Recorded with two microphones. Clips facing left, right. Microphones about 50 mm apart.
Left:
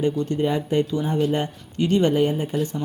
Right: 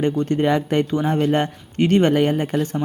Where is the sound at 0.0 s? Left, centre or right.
Right.